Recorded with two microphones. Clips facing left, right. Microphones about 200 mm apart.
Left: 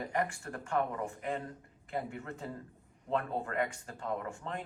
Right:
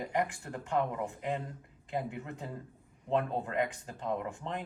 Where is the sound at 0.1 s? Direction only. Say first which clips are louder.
Right 2 dB; 15° right (ahead or behind).